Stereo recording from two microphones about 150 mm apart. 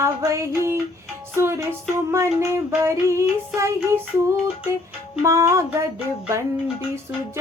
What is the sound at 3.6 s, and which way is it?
Female singing, 15° right (ahead or behind).